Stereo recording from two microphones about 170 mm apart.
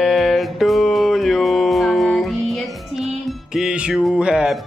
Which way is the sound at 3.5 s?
5° right (ahead or behind).